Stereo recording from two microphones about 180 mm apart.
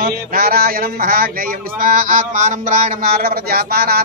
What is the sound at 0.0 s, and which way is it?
A man's voice, 55° right (ahead or behind).